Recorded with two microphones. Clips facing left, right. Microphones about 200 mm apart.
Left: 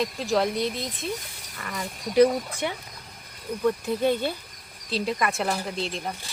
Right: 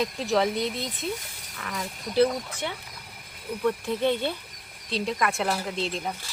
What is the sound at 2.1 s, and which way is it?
Speech, 15° left (ahead or behind).